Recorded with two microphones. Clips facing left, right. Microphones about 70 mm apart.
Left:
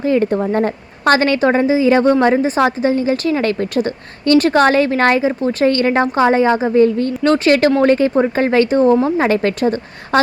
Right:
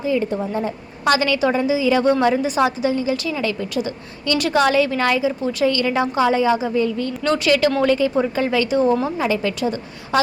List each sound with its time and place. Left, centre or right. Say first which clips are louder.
0.0 s a woman's voice: left 6 dB; left